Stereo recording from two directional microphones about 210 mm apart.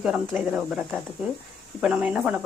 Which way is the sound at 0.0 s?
Centre (ahead or behind).